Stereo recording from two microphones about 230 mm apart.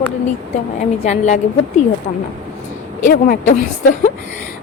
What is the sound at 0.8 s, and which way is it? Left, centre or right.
Speech, left.